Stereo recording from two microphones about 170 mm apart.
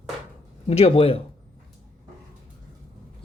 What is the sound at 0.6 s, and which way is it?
Speech, 35° left (ahead or behind).